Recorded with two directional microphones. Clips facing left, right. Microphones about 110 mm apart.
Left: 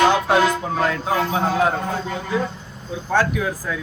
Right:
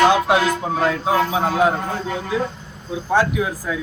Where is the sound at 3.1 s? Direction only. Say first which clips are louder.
Right 1 dB; 15° right (ahead or behind).